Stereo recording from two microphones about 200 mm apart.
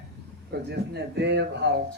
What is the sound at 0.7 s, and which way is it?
Speech, 55° right (ahead or behind).